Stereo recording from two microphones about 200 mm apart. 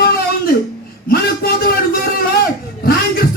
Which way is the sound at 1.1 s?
50° left (ahead or behind).